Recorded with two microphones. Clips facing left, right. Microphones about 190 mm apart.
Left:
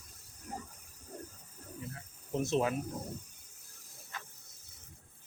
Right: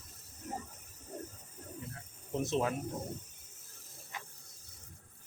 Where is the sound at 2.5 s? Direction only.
10° left (ahead or behind).